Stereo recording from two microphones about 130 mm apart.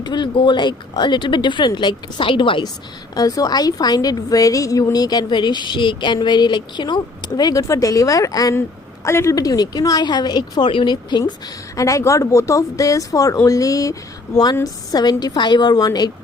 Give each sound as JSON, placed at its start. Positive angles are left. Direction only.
{"t": 0.0, "sound": "speech", "side_deg": 35}
{"t": 3.2, "sound": "a woman's voice", "side_deg": 30}